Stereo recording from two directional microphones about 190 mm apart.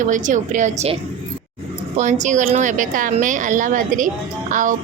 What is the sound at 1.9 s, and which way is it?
A woman's voice, 40° right (ahead or behind).